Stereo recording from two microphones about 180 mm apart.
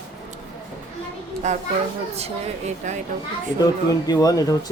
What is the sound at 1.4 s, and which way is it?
A woman's voice, 40° right (ahead or behind).